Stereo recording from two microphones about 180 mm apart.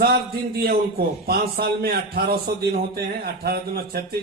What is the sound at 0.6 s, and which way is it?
Speech, 60° right (ahead or behind).